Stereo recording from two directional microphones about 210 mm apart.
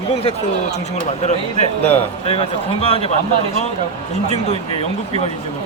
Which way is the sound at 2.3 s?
25° left (ahead or behind).